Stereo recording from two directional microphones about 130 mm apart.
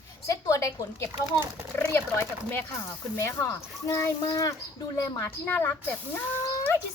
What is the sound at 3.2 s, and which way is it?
A woman's voice, 20° left (ahead or behind).